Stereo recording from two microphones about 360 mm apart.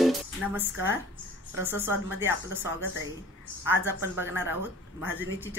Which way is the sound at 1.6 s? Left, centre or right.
Centre.